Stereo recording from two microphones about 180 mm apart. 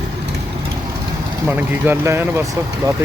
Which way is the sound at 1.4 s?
10° right (ahead or behind).